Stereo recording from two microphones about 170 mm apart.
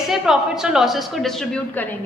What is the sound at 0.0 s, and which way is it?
A woman's voice, centre (ahead or behind).